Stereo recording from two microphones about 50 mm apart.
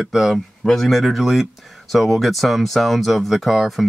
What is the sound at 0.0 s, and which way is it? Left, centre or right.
Speech, centre.